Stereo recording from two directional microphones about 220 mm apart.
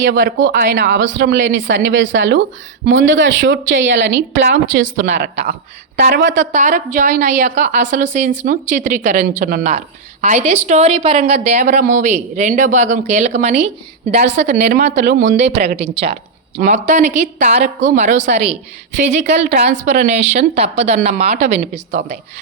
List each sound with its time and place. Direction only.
0.0 s speech: 45° right (ahead or behind)
5.1 s speech: 30° right (ahead or behind)
6.0 s speech: 40° right (ahead or behind)
6.5 s speech: 35° right (ahead or behind)
14.3 s speech: 50° right (ahead or behind)
15.2 s speech: 55° right (ahead or behind)
15.7 s speech: 30° right (ahead or behind)